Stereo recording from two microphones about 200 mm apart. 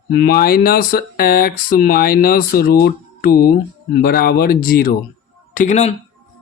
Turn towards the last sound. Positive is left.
turn(degrees=35)  # may be behind; listen again after turning